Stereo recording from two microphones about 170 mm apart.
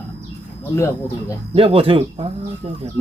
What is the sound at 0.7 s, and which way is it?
Speech, 15° left (ahead or behind).